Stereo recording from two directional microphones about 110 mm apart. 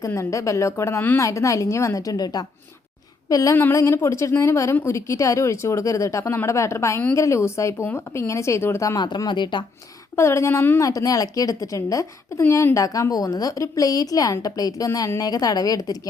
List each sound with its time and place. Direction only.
0.0 s a woman's voice: 30° left (ahead or behind)
9.0 s speech: 40° left (ahead or behind)
10.2 s a woman's voice: 25° left (ahead or behind)
10.8 s speech: 30° left (ahead or behind)